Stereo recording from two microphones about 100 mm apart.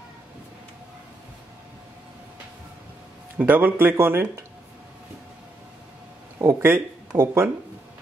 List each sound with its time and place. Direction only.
3.3 s speech: 20° right (ahead or behind)
6.4 s speech: 20° right (ahead or behind)